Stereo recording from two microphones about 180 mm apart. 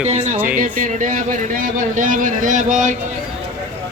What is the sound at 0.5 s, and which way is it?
Speech, 45° right (ahead or behind).